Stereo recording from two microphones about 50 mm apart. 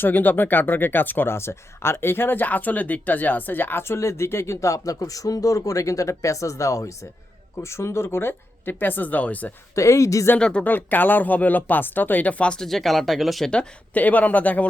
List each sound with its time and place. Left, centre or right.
0.0 s speech: left
1.4 s speech: left
7.6 s speech: left
9.7 s speech: left
10.6 s speech: left
12.5 s speech: centre
13.9 s speech: left